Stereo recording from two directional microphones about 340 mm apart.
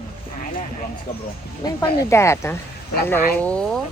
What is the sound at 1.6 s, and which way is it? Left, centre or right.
A woman's voice, centre.